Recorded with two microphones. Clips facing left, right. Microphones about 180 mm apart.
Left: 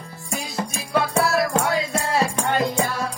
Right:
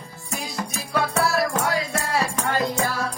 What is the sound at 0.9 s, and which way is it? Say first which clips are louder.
Music: left 3 dB; 25° left (ahead or behind).